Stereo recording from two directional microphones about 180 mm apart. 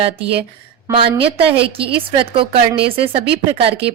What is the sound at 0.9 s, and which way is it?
Speech, 30° right (ahead or behind).